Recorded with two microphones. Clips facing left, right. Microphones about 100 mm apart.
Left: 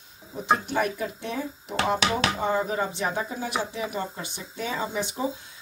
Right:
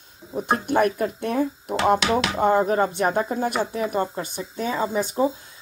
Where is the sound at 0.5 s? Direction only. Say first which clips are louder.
Right 4 dB; 55° right (ahead or behind).